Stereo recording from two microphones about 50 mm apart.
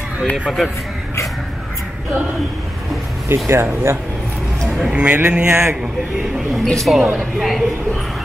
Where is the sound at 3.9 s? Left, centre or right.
Right.